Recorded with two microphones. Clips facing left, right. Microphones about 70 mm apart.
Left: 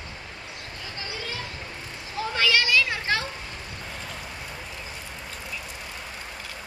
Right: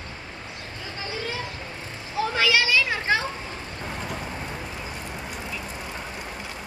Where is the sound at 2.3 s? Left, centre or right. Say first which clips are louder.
Even; centre.